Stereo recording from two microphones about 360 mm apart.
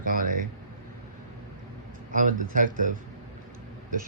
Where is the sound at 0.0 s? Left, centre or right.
Right.